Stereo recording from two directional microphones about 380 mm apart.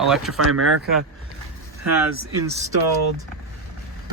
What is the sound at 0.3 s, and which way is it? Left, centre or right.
Speech, right.